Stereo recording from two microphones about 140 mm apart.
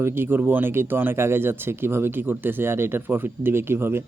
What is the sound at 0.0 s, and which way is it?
Speech, 15° right (ahead or behind).